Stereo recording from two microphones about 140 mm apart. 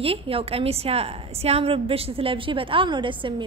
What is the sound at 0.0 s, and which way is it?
A woman's voice, 45° right (ahead or behind).